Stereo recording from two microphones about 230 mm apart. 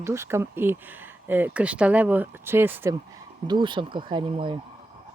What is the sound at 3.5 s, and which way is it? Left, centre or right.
Speech, right.